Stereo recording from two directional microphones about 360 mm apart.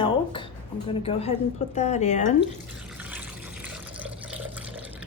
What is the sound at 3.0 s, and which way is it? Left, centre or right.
Water, centre.